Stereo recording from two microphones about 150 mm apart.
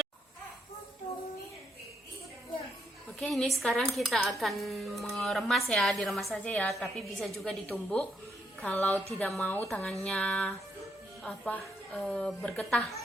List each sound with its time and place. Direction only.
3.2 s speech: centre (ahead or behind)
6.3 s a woman's voice: 10° left (ahead or behind)